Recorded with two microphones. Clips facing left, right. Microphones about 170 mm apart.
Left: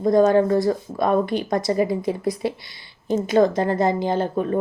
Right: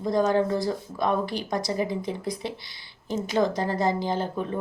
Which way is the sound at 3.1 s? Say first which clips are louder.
Left 7 dB; 55° left (ahead or behind).